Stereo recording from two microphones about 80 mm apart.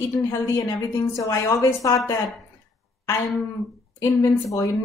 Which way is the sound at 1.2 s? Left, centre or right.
Left.